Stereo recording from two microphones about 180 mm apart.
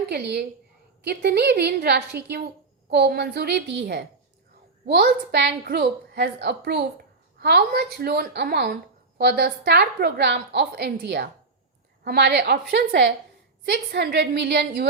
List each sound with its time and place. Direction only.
0.1 s a woman's voice: 65° right (ahead or behind)